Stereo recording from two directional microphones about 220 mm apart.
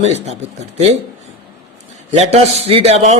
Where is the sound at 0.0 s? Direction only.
30° right (ahead or behind).